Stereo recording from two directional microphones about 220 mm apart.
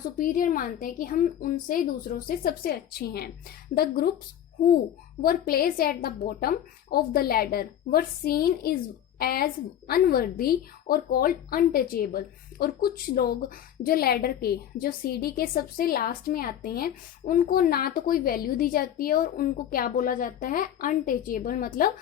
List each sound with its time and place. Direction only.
0.2 s a woman's voice: 40° left (ahead or behind)
5.2 s a woman's voice: 40° left (ahead or behind)